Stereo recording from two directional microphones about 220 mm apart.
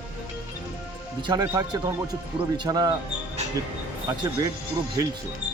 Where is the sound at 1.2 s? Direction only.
20° right (ahead or behind).